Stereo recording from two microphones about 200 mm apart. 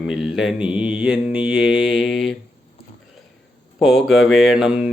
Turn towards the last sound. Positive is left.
turn(degrees=-5)  # may be behind; listen again after turning